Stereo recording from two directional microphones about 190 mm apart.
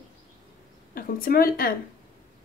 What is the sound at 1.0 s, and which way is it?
Speech, 50° left (ahead or behind).